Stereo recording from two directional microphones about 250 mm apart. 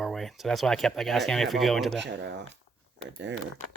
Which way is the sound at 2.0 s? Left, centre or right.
Right.